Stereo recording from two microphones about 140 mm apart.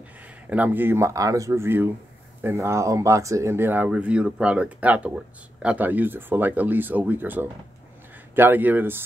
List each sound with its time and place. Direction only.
0.2 s speech: 10° right (ahead or behind)